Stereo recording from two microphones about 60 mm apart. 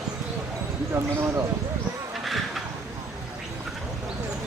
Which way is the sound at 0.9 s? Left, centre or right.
Right.